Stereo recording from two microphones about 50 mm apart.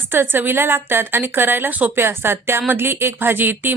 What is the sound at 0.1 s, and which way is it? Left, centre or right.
A woman's voice, right.